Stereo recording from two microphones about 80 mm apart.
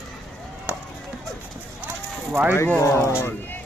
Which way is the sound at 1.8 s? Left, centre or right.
Centre.